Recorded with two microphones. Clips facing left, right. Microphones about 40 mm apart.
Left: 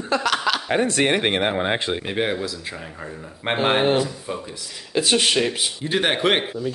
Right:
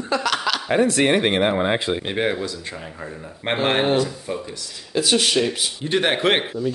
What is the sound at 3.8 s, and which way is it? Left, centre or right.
Speech, centre.